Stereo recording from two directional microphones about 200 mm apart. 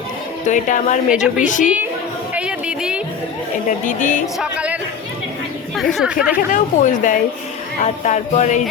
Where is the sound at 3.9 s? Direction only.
40° left (ahead or behind).